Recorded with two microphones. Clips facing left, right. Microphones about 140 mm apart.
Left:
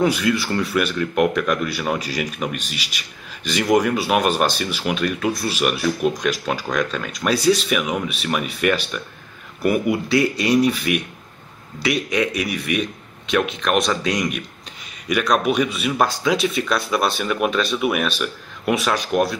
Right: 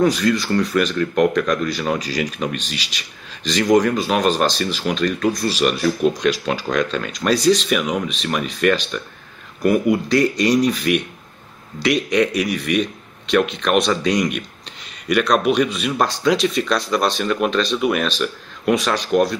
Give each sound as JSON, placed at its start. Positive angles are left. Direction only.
{"t": 0.0, "sound": "speech", "side_deg": 10}